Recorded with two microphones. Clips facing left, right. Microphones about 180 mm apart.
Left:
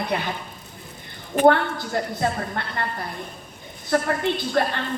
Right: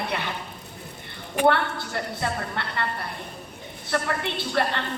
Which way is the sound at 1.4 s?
45° left (ahead or behind).